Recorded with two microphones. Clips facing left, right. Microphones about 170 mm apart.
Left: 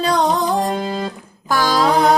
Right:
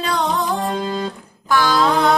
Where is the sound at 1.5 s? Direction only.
40° left (ahead or behind).